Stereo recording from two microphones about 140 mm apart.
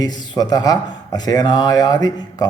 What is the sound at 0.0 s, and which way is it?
A man's voice, 30° left (ahead or behind).